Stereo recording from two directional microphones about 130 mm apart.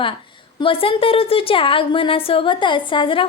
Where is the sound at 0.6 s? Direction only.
45° left (ahead or behind).